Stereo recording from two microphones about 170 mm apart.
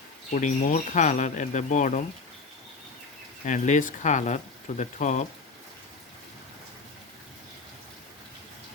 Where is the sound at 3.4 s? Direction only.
45° left (ahead or behind).